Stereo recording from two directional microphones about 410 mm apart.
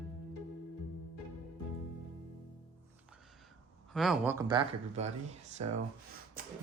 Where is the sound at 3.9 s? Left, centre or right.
Centre.